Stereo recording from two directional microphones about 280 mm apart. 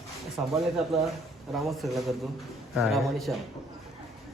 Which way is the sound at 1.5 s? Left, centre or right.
Centre.